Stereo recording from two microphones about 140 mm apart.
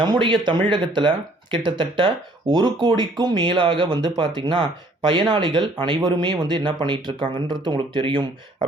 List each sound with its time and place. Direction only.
0.0 s speech: 35° right (ahead or behind)